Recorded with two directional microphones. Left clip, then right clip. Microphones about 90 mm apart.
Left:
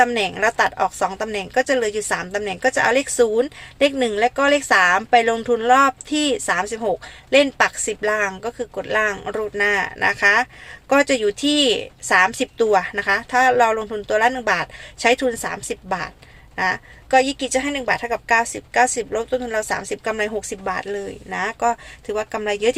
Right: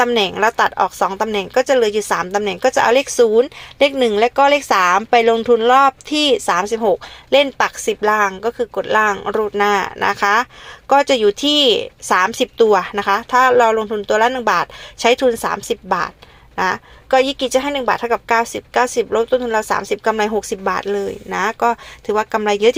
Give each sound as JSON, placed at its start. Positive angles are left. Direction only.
{"t": 0.0, "sound": "speech", "side_deg": -30}